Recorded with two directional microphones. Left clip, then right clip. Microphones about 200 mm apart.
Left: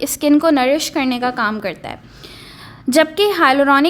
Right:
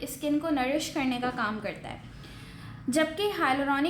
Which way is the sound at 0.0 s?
50° left (ahead or behind).